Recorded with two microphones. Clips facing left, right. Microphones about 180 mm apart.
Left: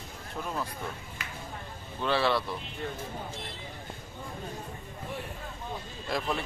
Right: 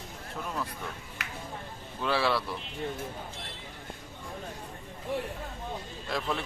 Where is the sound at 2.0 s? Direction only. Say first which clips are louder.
Left 1 dB; 5° right (ahead or behind).